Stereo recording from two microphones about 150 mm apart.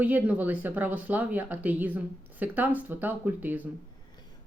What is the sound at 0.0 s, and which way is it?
Speech, 10° right (ahead or behind).